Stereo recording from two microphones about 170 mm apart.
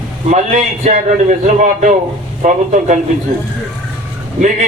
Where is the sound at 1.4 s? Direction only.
45° right (ahead or behind).